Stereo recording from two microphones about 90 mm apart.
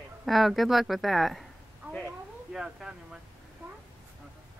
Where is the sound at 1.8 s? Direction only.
25° right (ahead or behind).